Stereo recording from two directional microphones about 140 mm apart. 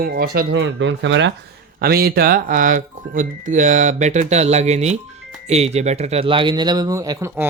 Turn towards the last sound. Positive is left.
turn(degrees=-20)  # may be behind; listen again after turning